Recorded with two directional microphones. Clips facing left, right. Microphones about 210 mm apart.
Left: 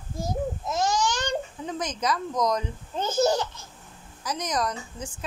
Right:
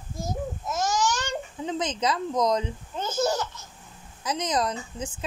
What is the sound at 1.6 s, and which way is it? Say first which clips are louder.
Speech: right 6 dB; 25° right (ahead or behind).